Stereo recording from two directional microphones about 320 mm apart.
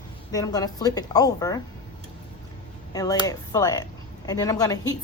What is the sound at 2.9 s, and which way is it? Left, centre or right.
Speech, centre.